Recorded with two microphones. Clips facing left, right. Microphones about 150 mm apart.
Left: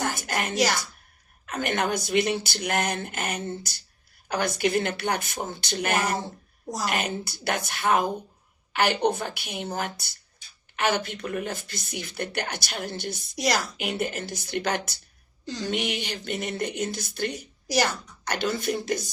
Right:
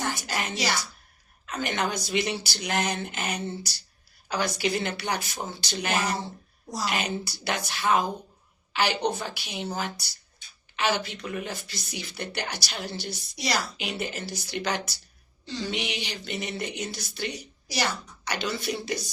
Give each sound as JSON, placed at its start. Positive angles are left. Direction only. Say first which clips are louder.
{"t": 0.0, "sound": "music", "louder": "left 2 dB", "side_deg": 50}
{"t": 1.5, "sound": "speech", "louder": "left 2 dB", "side_deg": 55}